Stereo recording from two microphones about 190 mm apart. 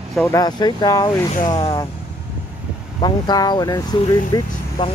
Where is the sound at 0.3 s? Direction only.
20° left (ahead or behind).